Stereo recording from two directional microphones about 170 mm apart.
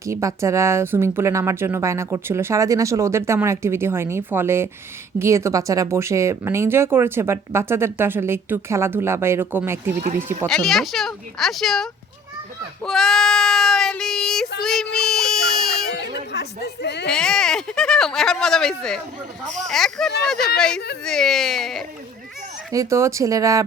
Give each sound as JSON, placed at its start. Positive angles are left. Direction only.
{"t": 0.0, "sound": "speech", "side_deg": -20}
{"t": 10.0, "sound": "speech", "side_deg": -55}
{"t": 10.4, "sound": "speech", "side_deg": 0}
{"t": 15.0, "sound": "baby cry", "side_deg": 0}
{"t": 15.9, "sound": "a sound", "side_deg": 85}
{"t": 17.1, "sound": "speech", "side_deg": 5}
{"t": 22.7, "sound": "speech", "side_deg": -20}